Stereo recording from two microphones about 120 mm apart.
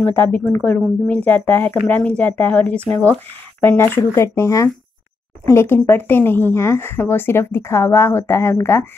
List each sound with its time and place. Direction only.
0.0 s speech: 15° left (ahead or behind)